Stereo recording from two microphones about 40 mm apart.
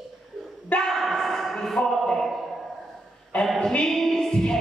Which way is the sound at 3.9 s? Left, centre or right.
Centre.